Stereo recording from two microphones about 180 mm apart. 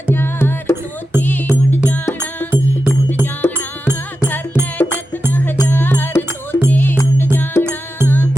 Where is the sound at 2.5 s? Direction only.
15° right (ahead or behind).